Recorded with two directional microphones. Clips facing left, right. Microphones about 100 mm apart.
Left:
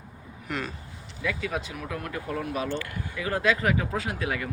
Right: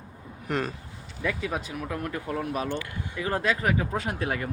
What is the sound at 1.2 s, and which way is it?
Speech, 30° right (ahead or behind).